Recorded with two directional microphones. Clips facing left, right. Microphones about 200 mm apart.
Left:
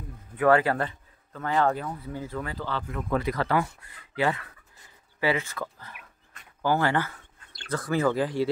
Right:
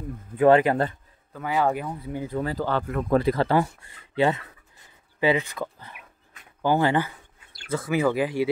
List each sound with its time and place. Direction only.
0.4 s speech: 20° right (ahead or behind)
1.3 s speech: 10° right (ahead or behind)
2.4 s speech: 45° right (ahead or behind)
3.2 s speech: 30° right (ahead or behind); by 8.5 s 10° right (ahead or behind)